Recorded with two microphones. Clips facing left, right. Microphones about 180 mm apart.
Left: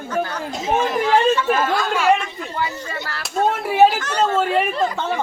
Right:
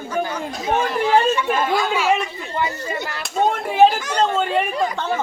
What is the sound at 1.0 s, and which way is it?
Speech, 10° right (ahead or behind).